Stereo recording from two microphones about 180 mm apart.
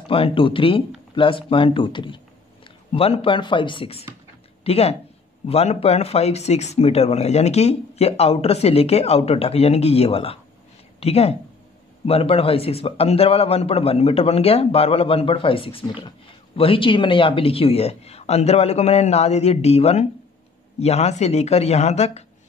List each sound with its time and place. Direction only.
0.1 s speech: 30° left (ahead or behind)